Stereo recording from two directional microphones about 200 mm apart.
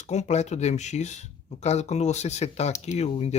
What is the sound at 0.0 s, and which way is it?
Speech, 35° left (ahead or behind).